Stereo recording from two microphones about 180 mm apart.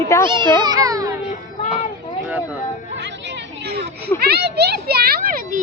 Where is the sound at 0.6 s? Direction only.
20° right (ahead or behind).